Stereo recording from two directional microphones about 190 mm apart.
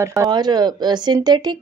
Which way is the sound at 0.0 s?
15° right (ahead or behind).